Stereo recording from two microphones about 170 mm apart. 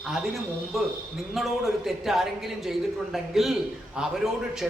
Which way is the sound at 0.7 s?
Centre (ahead or behind).